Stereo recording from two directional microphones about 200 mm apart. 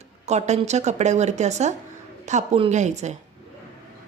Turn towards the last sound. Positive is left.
turn(degrees=-35)  # may be behind; listen again after turning